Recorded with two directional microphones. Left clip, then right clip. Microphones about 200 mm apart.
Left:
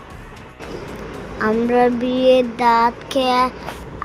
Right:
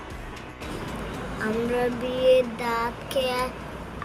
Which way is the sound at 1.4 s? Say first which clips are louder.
Left 10 dB; 35° left (ahead or behind).